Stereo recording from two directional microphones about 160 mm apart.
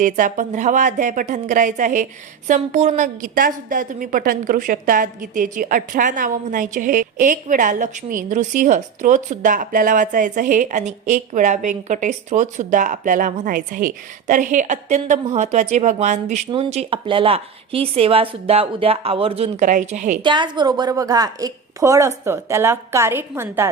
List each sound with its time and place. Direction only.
0.0 s a woman's voice: 55° right (ahead or behind)
20.2 s a woman's voice: 30° right (ahead or behind); by 23.6 s 15° right (ahead or behind)